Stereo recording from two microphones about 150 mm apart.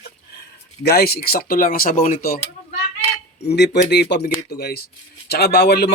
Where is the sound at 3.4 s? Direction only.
90° left.